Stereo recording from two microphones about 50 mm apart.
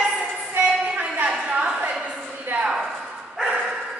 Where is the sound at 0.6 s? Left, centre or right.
Centre.